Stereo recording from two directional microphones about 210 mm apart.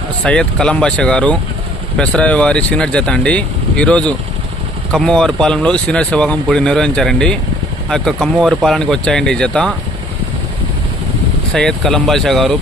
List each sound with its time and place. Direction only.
0.2 s speech: 5° left (ahead or behind)
11.5 s speech: 5° left (ahead or behind)